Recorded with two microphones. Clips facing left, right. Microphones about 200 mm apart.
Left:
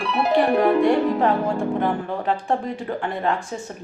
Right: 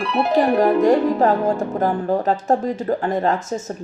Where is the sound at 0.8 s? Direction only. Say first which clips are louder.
Right 3 dB; 40° right (ahead or behind).